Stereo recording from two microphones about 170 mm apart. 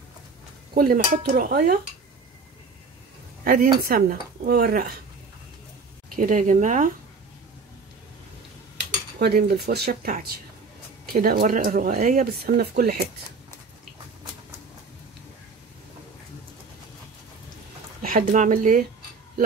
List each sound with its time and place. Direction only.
0.7 s speech: 55° right (ahead or behind)
3.4 s speech: 55° right (ahead or behind)
6.1 s speech: 50° right (ahead or behind)
9.2 s speech: 70° right (ahead or behind)
18.3 s speech: 50° right (ahead or behind)